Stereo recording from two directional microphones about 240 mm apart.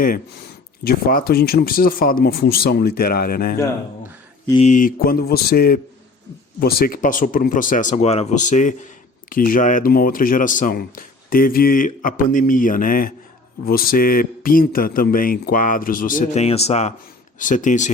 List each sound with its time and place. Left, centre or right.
0.9 s speech: left